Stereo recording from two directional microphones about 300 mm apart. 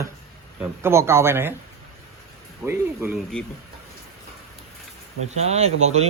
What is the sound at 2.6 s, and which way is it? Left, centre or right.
Speech, centre.